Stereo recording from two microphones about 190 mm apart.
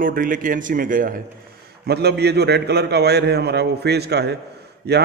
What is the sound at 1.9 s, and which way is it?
A man's voice, 60° right (ahead or behind).